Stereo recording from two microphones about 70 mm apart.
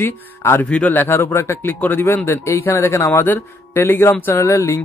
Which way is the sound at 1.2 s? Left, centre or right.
Left.